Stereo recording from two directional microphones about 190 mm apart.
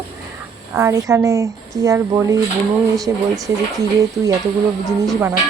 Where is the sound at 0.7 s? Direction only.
15° right (ahead or behind).